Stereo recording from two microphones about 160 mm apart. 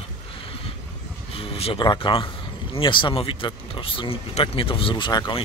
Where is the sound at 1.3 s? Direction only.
40° left (ahead or behind).